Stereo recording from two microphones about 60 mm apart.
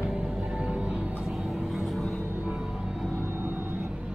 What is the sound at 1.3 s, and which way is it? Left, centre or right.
Vehicle, centre.